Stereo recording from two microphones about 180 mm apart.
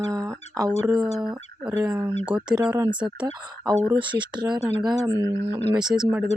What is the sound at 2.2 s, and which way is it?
Speech, 5° right (ahead or behind).